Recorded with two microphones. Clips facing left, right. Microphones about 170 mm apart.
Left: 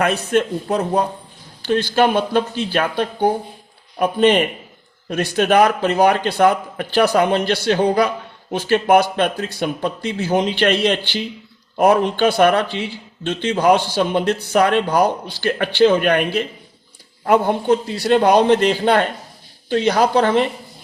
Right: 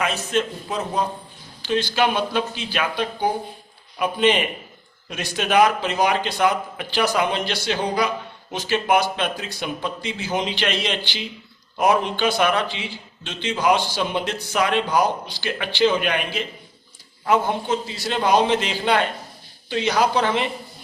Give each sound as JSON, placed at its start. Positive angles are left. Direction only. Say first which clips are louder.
{"t": 0.0, "sound": "a man's voice", "louder": "left 5 dB", "side_deg": 60}